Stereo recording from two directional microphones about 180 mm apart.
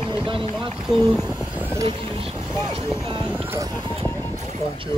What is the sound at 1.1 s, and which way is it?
Vehicle, 5° right (ahead or behind).